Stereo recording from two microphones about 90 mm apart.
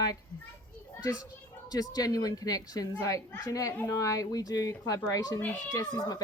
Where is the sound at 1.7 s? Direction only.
45° left (ahead or behind).